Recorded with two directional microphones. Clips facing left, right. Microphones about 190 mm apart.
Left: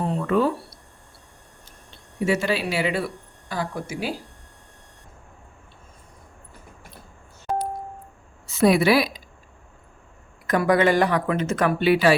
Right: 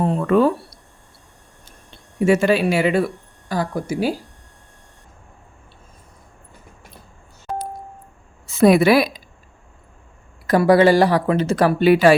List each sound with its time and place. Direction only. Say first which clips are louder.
0.0 s speech: right 5 dB; 60° right (ahead or behind)
2.2 s speech: right 7 dB; 50° right (ahead or behind)
8.4 s a woman's voice: right 5 dB; 50° right (ahead or behind)
10.4 s speech: right 6 dB; 35° right (ahead or behind)